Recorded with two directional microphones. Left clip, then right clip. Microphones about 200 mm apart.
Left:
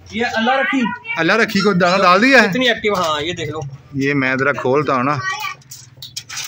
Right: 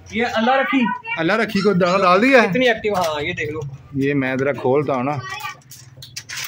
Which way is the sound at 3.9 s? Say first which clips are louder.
Left 3 dB; centre (ahead or behind).